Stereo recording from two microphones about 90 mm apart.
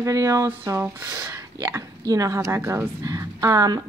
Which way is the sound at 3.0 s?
40° right (ahead or behind).